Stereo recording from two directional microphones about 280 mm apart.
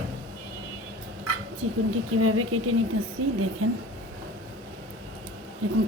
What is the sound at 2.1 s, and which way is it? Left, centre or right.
A woman's voice, right.